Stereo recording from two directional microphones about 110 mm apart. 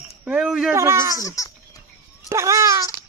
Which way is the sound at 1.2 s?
30° left (ahead or behind).